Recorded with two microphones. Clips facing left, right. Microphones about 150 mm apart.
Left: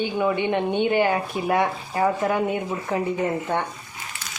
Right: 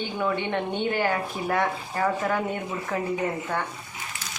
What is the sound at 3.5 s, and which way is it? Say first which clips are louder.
Speech: left 4 dB; 25° left (ahead or behind).